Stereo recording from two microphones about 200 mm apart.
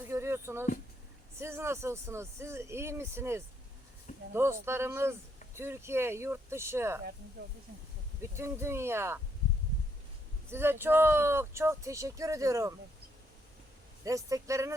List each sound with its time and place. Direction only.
0.1 s a sound: 15° right (ahead or behind)
1.4 s speech: 15° right (ahead or behind)
4.6 s speech: 10° right (ahead or behind)
8.2 s speech: 15° right (ahead or behind)
10.5 s speech: 10° right (ahead or behind)
14.0 s speech: 15° right (ahead or behind)